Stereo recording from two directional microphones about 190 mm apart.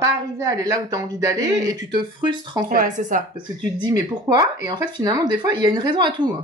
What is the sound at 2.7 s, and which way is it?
Speech, 45° right (ahead or behind).